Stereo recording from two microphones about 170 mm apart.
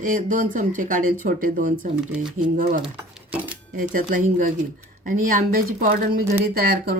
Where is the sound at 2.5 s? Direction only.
50° right (ahead or behind).